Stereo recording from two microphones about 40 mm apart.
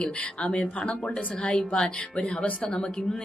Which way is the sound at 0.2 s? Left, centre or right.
Left.